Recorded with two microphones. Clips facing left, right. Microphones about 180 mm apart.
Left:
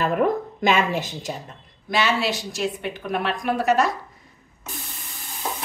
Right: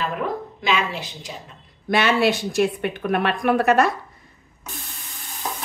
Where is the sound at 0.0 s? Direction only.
50° left (ahead or behind).